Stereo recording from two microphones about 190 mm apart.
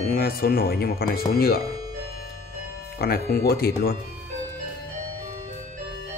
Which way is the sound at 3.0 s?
55° left (ahead or behind).